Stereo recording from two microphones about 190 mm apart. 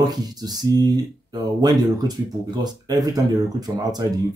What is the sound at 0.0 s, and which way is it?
Speech, 20° right (ahead or behind).